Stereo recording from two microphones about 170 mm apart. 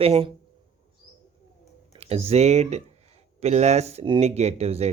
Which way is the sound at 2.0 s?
35° right (ahead or behind).